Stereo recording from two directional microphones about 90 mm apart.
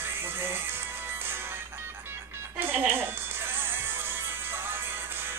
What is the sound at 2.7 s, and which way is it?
Speech, 25° right (ahead or behind).